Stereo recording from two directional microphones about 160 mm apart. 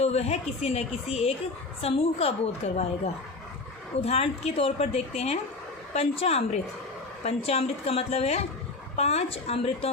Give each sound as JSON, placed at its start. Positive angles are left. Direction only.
{"t": 0.0, "sound": "a woman's voice", "side_deg": 40}
{"t": 4.0, "sound": "a woman's voice", "side_deg": 40}